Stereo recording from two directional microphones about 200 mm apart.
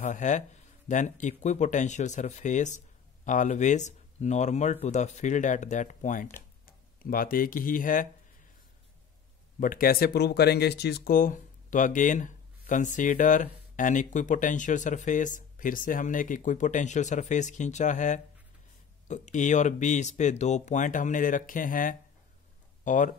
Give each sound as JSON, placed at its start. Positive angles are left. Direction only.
{"t": 0.0, "sound": "speech", "side_deg": 40}
{"t": 9.6, "sound": "speech", "side_deg": 45}